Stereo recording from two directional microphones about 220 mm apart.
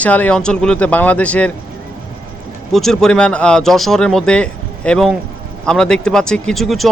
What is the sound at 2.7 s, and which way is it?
Speech, centre (ahead or behind).